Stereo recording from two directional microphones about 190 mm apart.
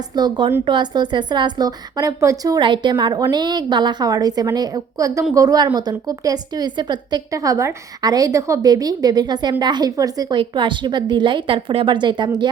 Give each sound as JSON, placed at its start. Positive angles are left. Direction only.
{"t": 0.2, "sound": "a woman's voice", "side_deg": -25}